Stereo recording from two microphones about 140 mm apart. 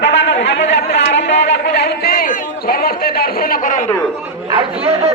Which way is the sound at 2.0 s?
90° left.